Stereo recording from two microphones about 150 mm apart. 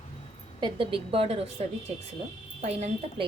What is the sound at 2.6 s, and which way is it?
Speech, 45° right (ahead or behind).